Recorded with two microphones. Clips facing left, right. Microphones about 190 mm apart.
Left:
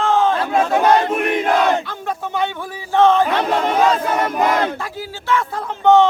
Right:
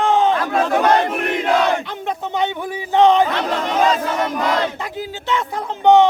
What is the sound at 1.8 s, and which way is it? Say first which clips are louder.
Speech: right 1 dB; 20° right (ahead or behind).